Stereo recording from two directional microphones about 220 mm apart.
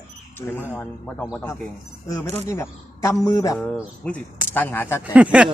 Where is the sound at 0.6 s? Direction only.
10° left (ahead or behind).